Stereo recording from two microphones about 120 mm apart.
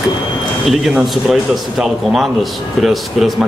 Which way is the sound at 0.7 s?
Centre (ahead or behind).